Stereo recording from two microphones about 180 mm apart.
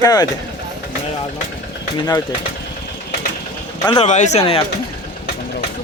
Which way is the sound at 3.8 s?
30° left (ahead or behind).